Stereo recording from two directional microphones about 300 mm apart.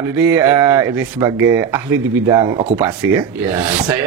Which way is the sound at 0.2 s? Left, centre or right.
Centre.